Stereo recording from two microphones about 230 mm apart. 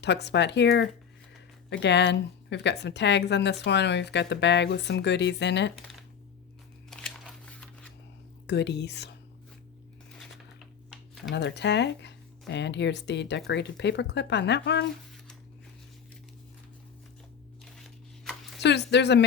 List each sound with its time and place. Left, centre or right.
0.0 s a woman's voice: left
6.9 s a sound: centre
8.4 s a woman's voice: left
10.9 s a sound: centre
11.3 s a woman's voice: left
18.6 s a woman's voice: left